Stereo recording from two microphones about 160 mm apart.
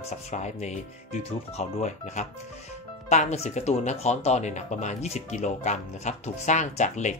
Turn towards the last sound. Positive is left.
turn(degrees=50)  # may be behind; listen again after turning